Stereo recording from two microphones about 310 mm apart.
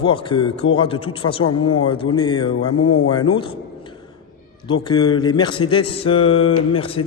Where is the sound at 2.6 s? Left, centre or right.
Left.